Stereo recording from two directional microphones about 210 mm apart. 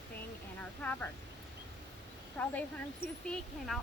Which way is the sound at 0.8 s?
10° left (ahead or behind).